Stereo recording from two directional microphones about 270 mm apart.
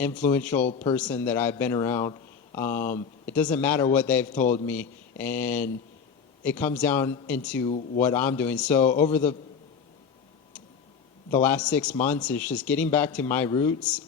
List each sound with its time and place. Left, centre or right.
0.0 s speech: centre
0.7 s speech: left
0.9 s speech: centre
11.3 s speech: centre